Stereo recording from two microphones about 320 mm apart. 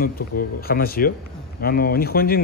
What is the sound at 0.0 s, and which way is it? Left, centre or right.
Speech, left.